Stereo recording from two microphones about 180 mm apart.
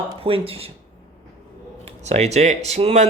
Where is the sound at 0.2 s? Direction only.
30° right (ahead or behind).